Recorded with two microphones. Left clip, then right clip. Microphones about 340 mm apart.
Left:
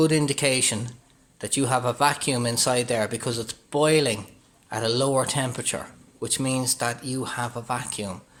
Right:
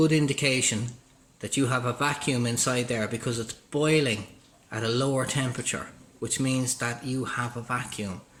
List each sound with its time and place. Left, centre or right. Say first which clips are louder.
0.0 s speech: left 2 dB; centre